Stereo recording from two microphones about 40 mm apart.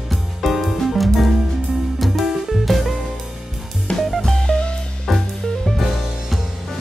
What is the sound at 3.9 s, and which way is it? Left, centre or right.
Music, left.